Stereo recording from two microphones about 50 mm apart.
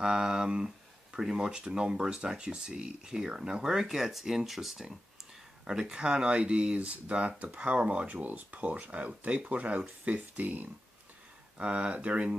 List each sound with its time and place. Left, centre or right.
0.0 s speech: centre